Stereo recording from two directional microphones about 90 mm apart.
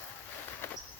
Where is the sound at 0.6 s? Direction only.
30° left (ahead or behind).